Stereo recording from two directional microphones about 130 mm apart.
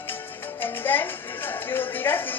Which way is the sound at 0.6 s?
15° left (ahead or behind).